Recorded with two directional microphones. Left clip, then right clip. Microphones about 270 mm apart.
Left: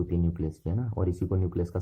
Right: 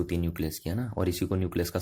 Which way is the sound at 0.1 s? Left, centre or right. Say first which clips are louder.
Even; right.